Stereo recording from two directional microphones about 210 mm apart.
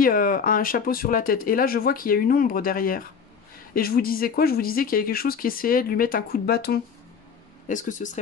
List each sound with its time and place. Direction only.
0.0 s speech: 40° left (ahead or behind)
7.6 s speech: 35° left (ahead or behind)